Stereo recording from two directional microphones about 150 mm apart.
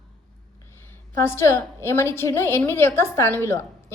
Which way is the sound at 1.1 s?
15° left (ahead or behind).